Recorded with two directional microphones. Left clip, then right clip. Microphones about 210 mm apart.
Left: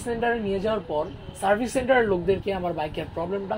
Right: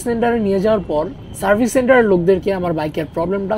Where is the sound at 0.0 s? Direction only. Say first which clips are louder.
Right 8 dB; 45° right (ahead or behind).